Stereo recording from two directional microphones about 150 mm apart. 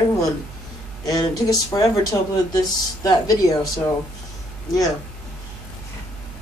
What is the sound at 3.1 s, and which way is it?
Speech, 25° left (ahead or behind).